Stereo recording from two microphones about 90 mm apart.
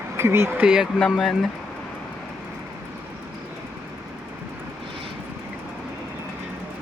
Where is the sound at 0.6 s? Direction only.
10° right (ahead or behind).